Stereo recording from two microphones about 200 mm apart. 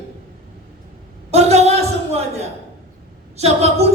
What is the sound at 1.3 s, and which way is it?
Speech, 35° right (ahead or behind).